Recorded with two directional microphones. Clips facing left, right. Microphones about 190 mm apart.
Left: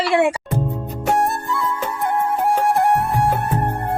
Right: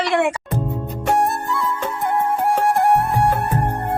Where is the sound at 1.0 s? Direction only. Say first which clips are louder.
Even; centre (ahead or behind).